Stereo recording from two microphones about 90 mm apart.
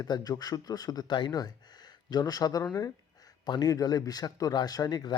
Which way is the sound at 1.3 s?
45° left (ahead or behind).